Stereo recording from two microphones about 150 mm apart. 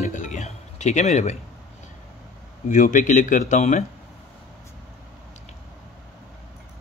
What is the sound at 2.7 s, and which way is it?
Speech, 60° left (ahead or behind).